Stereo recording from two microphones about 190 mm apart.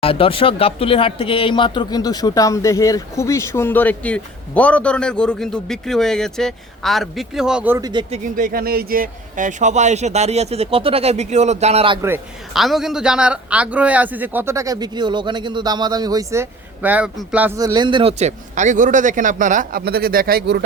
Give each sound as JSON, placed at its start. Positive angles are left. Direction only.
{"t": 0.0, "sound": "speech", "side_deg": 30}
{"t": 7.8, "sound": "speech", "side_deg": -20}
{"t": 8.1, "sound": "speech", "side_deg": -45}
{"t": 12.5, "sound": "a man's voice", "side_deg": 0}
{"t": 17.7, "sound": "speech", "side_deg": -25}